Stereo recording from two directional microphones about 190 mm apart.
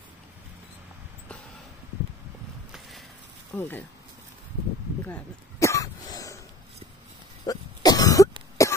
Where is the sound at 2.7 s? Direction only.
Centre (ahead or behind).